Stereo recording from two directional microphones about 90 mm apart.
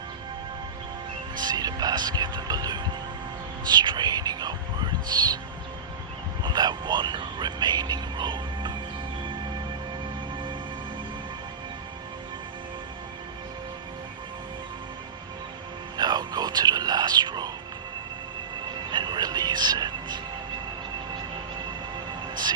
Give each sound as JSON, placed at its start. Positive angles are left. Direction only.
{"t": 1.4, "sound": "music", "side_deg": -50}
{"t": 6.4, "sound": "music", "side_deg": -50}
{"t": 16.0, "sound": "music", "side_deg": -50}
{"t": 18.9, "sound": "music", "side_deg": -55}